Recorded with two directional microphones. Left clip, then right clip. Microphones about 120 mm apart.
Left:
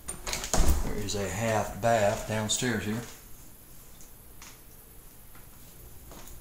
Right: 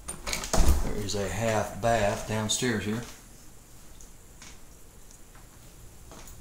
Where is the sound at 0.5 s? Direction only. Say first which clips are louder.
Right 1 dB; 25° right (ahead or behind).